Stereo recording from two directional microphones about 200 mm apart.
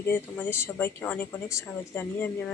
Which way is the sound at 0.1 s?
10° left (ahead or behind).